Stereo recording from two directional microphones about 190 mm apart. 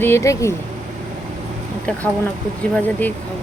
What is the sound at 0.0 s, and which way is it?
Speech, 15° left (ahead or behind).